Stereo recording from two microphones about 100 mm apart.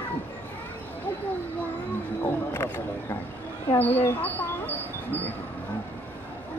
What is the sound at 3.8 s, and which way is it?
Speech, 20° left (ahead or behind).